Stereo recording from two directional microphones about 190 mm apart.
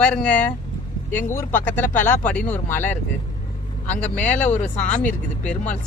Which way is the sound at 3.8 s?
35° left (ahead or behind).